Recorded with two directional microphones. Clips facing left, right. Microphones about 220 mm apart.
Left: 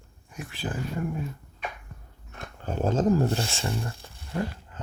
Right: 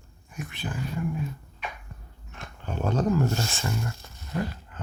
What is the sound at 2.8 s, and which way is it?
Speech, 30° left (ahead or behind).